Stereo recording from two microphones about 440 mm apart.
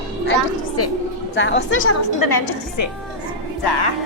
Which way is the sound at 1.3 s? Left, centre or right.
Left.